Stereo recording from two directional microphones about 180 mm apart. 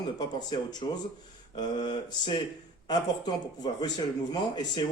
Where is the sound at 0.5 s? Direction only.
25° left (ahead or behind).